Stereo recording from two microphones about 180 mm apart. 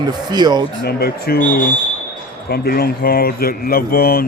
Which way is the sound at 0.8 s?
60° left (ahead or behind).